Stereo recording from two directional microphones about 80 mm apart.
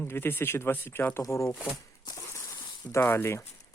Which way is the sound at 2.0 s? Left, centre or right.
Left.